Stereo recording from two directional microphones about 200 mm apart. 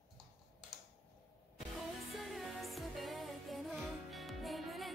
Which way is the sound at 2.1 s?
Centre (ahead or behind).